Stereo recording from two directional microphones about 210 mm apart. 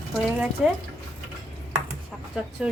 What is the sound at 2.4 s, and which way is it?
Speech, 5° right (ahead or behind).